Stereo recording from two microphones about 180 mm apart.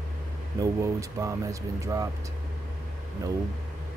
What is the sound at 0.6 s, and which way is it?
Speech, 15° right (ahead or behind).